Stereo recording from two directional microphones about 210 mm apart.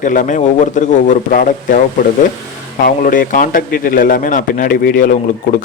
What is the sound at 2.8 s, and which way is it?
A man's voice, 40° left (ahead or behind).